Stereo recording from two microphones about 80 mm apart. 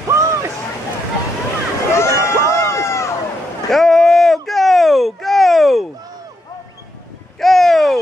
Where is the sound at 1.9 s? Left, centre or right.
Left.